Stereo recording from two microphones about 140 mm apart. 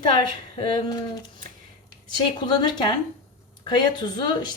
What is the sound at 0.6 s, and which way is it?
Speech, 35° left (ahead or behind).